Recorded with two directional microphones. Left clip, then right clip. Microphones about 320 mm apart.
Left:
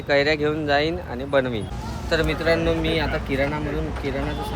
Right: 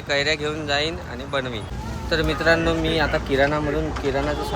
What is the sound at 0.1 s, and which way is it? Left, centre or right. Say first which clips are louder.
Speech: left 2 dB; centre.